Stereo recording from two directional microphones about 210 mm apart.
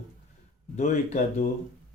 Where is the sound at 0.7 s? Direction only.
35° left (ahead or behind).